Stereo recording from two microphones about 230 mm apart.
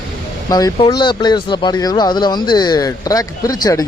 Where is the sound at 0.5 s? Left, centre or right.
Centre.